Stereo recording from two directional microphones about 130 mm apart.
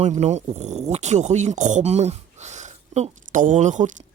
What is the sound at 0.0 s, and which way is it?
Speech, 60° right (ahead or behind).